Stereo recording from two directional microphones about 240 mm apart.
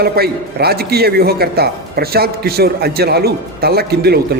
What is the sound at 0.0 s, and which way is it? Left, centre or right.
A man's voice, right.